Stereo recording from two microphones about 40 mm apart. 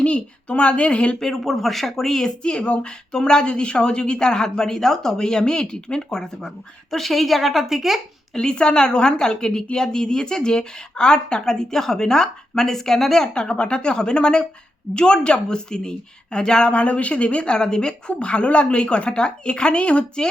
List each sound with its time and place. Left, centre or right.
0.0 s a woman's voice: left
1.2 s speech: centre
2.4 s a woman's voice: left; by 8.0 s centre
8.4 s a woman's voice: left